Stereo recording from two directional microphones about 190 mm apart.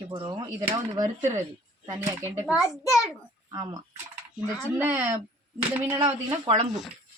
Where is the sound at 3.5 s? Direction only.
20° right (ahead or behind).